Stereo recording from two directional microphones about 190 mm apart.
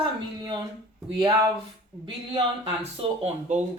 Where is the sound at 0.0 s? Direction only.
25° right (ahead or behind).